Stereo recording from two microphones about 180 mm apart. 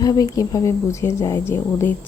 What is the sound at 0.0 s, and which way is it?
Speech, 20° left (ahead or behind).